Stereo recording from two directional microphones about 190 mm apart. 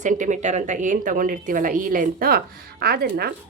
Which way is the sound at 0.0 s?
40° right (ahead or behind).